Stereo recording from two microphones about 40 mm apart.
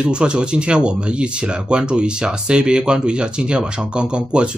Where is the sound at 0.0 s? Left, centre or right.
Right.